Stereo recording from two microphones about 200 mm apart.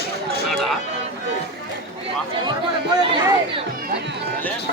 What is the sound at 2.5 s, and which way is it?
Chatter, 20° right (ahead or behind).